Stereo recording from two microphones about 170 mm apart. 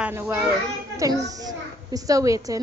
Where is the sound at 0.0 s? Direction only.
15° right (ahead or behind).